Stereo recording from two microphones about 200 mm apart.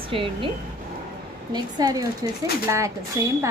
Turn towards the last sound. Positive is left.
turn(degrees=-15)  # may be behind; listen again after turning